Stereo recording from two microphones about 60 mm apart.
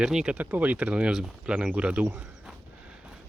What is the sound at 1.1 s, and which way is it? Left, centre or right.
Speech, centre.